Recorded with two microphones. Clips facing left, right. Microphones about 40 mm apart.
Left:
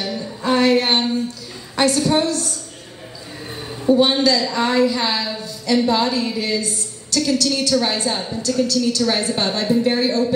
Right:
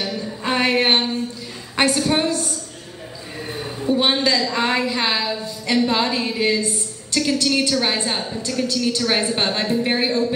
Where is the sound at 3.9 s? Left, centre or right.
Right.